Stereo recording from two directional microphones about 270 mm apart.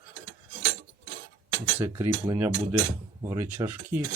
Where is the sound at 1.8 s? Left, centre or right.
Centre.